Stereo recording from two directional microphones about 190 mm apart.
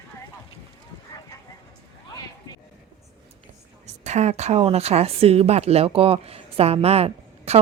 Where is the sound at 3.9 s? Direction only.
35° right (ahead or behind).